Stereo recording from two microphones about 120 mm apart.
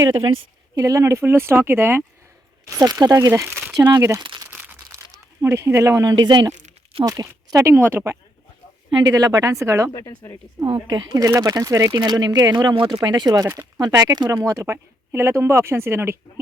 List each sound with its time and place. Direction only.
0.8 s speech: 30° right (ahead or behind)
2.6 s speech: 30° right (ahead or behind)
4.4 s crumpling: 15° right (ahead or behind); by 6.5 s 35° right (ahead or behind)
7.0 s speech: 30° right (ahead or behind)
7.7 s a woman's voice: 15° right (ahead or behind)
9.0 s speech: 30° right (ahead or behind)
9.9 s speech: 30° left (ahead or behind)
10.9 s speech: 30° right (ahead or behind)